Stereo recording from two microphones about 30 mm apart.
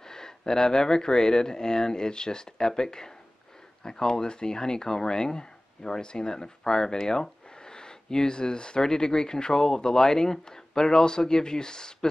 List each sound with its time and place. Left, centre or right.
0.1 s speech: centre